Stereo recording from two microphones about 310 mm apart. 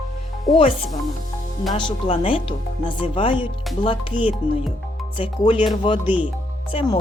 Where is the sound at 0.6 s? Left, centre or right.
Centre.